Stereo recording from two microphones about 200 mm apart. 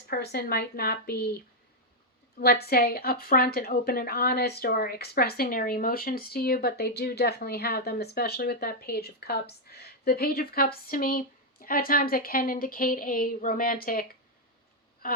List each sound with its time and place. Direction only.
0.1 s a woman's voice: 50° left (ahead or behind)
2.4 s a woman's voice: 50° left (ahead or behind)